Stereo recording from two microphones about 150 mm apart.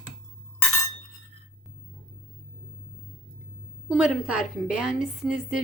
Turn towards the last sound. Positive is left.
turn(degrees=-5)  # may be behind; listen again after turning